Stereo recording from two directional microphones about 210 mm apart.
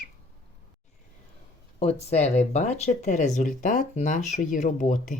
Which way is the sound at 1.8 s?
30° left (ahead or behind).